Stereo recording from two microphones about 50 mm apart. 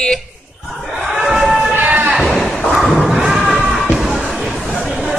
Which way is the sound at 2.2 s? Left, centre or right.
Centre.